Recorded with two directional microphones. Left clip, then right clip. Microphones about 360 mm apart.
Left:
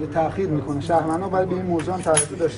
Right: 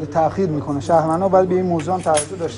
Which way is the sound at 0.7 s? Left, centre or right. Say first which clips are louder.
Right 5 dB; centre.